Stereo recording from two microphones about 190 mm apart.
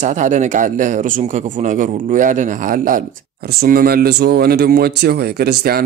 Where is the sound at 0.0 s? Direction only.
40° right (ahead or behind).